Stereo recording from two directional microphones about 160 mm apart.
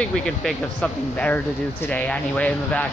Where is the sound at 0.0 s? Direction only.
Centre (ahead or behind).